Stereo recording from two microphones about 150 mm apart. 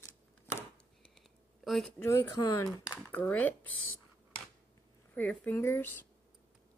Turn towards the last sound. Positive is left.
turn(degrees=15)  # may be behind; listen again after turning